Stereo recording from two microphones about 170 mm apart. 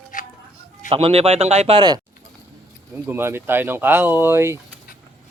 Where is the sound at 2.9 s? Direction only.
15° right (ahead or behind).